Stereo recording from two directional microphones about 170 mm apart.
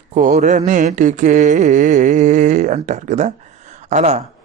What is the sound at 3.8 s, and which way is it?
Speech, 40° right (ahead or behind).